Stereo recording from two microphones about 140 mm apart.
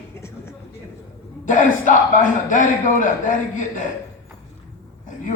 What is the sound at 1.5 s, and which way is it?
A man's voice, 70° left (ahead or behind).